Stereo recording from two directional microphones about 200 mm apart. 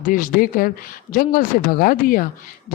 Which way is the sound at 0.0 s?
45° left (ahead or behind).